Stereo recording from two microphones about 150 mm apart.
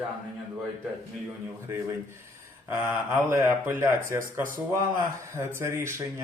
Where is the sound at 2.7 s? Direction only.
15° right (ahead or behind).